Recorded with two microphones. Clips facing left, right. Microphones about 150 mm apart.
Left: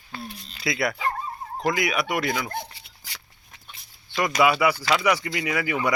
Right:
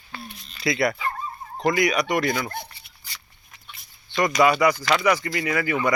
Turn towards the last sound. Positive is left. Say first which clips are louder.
# right 2 dB
turn(degrees=10)  # may be behind; listen again after turning